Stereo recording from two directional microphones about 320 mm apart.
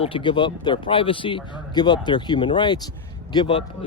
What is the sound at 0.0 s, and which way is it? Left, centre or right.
Speech, centre.